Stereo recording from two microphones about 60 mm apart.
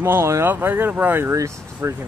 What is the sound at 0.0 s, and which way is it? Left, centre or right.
Speech, right.